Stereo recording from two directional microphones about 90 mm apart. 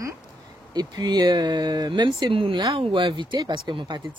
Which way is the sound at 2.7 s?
80° right.